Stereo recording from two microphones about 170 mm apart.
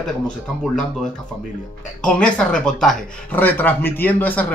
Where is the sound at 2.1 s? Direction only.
5° left (ahead or behind).